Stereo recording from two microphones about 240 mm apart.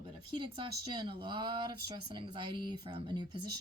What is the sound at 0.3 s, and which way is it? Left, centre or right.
Speech, right.